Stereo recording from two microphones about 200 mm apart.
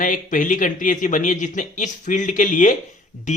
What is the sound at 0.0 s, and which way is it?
Speech, 40° left (ahead or behind).